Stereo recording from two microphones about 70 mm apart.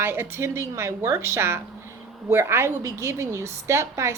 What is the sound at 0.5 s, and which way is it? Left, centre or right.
A woman's voice, right.